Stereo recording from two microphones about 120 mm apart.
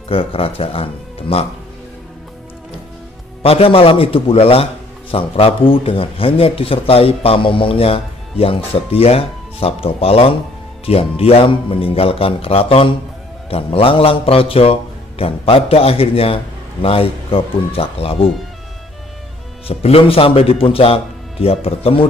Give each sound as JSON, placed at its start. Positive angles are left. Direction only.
{"t": 0.1, "sound": "speech", "side_deg": 50}
{"t": 3.4, "sound": "speech", "side_deg": 50}
{"t": 19.7, "sound": "speech", "side_deg": 55}